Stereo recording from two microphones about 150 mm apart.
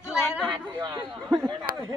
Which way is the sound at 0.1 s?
5° right (ahead or behind).